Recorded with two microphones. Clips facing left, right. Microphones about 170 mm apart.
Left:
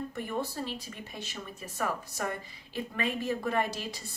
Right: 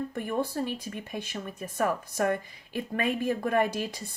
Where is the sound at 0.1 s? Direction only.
55° right (ahead or behind).